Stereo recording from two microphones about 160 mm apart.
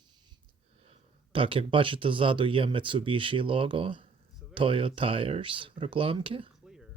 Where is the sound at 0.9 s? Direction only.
35° right (ahead or behind).